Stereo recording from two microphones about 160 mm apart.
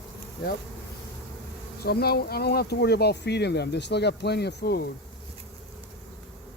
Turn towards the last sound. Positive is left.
turn(degrees=85)